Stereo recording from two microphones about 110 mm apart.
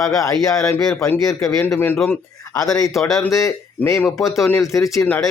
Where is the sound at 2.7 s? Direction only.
30° left (ahead or behind).